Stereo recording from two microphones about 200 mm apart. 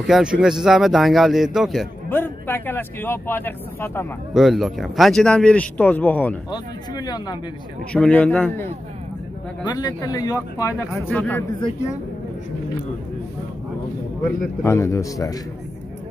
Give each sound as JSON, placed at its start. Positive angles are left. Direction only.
{"t": 0.0, "sound": "speech", "side_deg": -5}
{"t": 2.0, "sound": "speech", "side_deg": 10}
{"t": 4.3, "sound": "speech", "side_deg": 0}
{"t": 6.5, "sound": "speech", "side_deg": 20}
{"t": 7.9, "sound": "speech", "side_deg": 5}
{"t": 9.7, "sound": "speech", "side_deg": 20}
{"t": 14.6, "sound": "speech", "side_deg": 15}